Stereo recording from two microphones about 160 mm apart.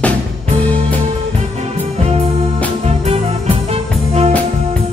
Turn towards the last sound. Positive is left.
turn(degrees=-40)  # may be behind; listen again after turning